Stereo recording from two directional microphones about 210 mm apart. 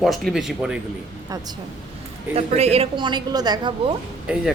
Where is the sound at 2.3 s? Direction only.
30° right (ahead or behind).